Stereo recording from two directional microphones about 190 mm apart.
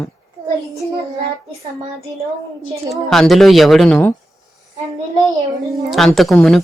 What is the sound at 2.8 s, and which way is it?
Speech, centre (ahead or behind).